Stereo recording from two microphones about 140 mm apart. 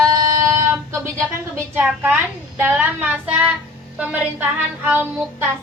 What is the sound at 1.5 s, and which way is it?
A woman's voice, 15° right (ahead or behind).